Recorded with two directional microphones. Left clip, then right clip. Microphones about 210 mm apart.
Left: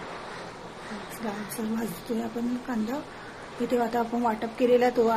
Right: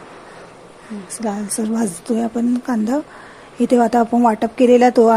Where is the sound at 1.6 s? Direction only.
55° right (ahead or behind).